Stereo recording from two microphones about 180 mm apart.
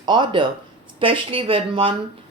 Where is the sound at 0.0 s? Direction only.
25° right (ahead or behind).